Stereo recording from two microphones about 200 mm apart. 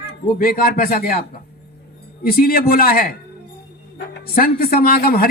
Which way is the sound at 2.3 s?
45° left (ahead or behind).